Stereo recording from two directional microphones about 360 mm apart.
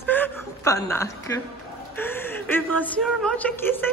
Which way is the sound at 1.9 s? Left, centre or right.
Centre.